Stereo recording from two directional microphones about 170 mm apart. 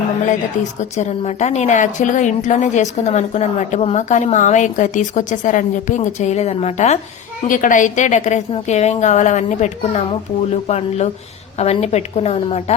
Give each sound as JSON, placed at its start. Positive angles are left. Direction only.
{"t": 0.3, "sound": "a woman's voice", "side_deg": 45}
{"t": 7.4, "sound": "a woman's voice", "side_deg": 50}